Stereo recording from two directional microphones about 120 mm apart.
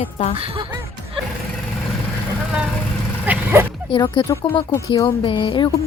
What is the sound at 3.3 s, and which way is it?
Dog, 15° right (ahead or behind).